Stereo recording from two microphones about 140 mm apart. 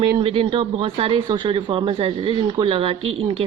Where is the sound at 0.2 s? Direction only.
40° right (ahead or behind).